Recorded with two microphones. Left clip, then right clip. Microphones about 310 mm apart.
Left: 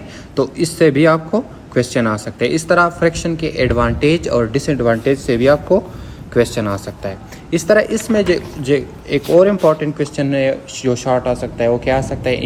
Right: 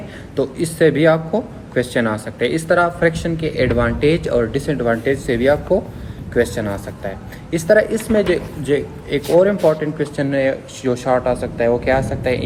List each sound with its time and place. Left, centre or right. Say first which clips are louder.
0.3 s a man's voice: left 2 dB; centre